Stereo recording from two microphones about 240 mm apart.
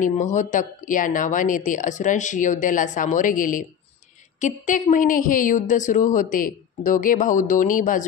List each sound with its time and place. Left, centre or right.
0.0 s speech: left